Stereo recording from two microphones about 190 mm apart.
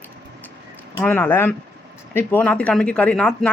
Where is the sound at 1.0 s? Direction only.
10° left (ahead or behind).